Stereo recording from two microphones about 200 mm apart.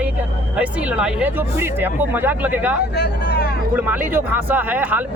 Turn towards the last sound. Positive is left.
turn(degrees=-10)  # may be behind; listen again after turning